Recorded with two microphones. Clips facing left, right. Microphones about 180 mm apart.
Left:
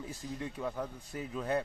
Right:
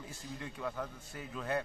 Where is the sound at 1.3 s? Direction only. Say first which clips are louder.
Left 3 dB; 30° left (ahead or behind).